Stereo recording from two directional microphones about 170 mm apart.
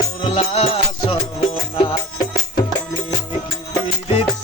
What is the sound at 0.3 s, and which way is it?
Music, 35° left (ahead or behind).